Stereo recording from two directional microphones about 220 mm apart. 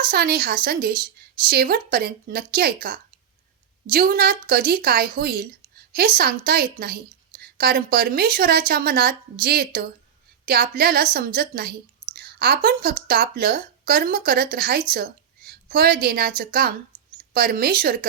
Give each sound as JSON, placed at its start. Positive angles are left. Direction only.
{"t": 0.0, "sound": "a woman's voice", "side_deg": -45}
{"t": 3.9, "sound": "a woman's voice", "side_deg": -45}